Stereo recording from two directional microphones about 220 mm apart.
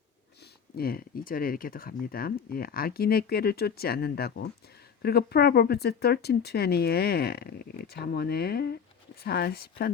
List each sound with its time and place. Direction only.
0.8 s speech: 40° left (ahead or behind)